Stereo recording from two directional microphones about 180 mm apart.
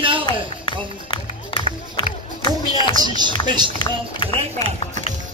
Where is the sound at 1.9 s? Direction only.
25° left (ahead or behind).